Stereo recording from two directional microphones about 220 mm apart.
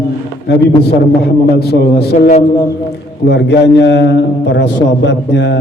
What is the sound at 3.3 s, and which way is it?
A man's voice, 50° left (ahead or behind).